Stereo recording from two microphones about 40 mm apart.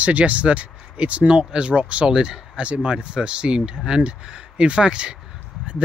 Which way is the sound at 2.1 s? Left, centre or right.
Right.